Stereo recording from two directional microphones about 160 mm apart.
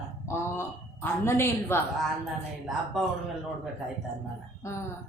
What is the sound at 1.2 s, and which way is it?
Speech, 15° left (ahead or behind).